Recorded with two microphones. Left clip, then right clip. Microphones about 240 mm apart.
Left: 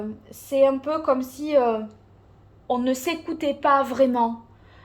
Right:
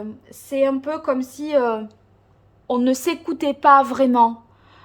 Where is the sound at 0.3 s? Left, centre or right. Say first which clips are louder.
Left 1 dB; centre.